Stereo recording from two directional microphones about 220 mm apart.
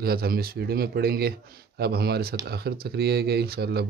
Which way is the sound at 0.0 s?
45° right (ahead or behind).